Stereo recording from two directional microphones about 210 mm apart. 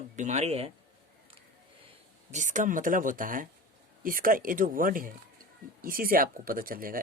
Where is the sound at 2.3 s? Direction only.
35° right (ahead or behind).